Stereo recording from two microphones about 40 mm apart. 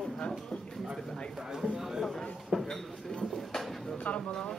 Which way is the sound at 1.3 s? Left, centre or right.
Centre.